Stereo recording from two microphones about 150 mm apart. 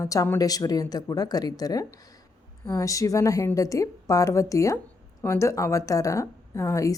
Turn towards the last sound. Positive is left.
turn(degrees=20)  # may be behind; listen again after turning